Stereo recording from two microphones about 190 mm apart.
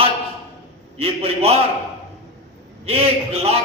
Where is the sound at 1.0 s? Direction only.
30° right (ahead or behind).